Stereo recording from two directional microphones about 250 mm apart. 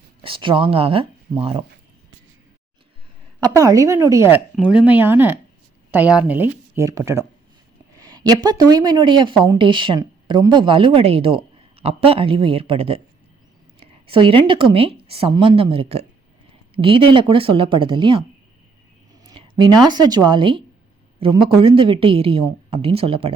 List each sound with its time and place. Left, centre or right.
0.2 s speech: right
3.4 s a woman's voice: centre